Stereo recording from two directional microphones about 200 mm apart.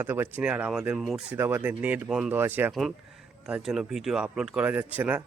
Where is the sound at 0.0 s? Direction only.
10° right (ahead or behind).